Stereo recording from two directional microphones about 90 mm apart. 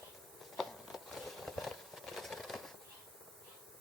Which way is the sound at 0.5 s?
Centre (ahead or behind).